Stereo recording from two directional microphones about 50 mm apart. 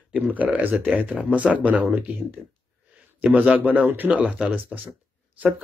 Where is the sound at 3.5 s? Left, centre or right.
Right.